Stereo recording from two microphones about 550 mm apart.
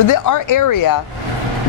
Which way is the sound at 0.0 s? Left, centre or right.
Left.